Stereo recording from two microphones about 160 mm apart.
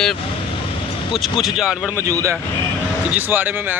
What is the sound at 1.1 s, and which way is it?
Speech, centre (ahead or behind).